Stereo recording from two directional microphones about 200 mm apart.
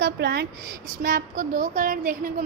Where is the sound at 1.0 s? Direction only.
45° right (ahead or behind).